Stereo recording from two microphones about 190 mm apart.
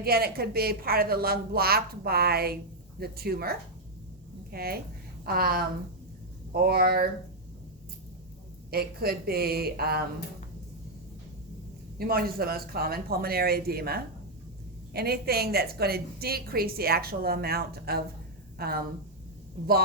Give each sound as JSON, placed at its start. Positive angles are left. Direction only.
{"t": 0.0, "sound": "a woman's voice", "side_deg": -55}
{"t": 8.7, "sound": "speech", "side_deg": -55}
{"t": 11.9, "sound": "a woman's voice", "side_deg": -50}